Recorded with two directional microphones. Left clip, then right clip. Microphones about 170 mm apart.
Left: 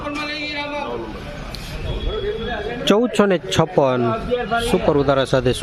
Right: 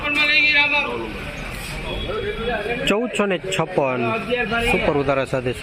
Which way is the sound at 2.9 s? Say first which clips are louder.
Left 9 dB; 35° left (ahead or behind).